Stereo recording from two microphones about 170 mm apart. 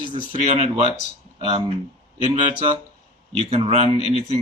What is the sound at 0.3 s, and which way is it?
Speech, 40° right (ahead or behind).